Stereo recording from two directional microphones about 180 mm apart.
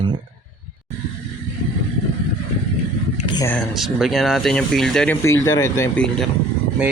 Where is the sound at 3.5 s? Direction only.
Centre (ahead or behind).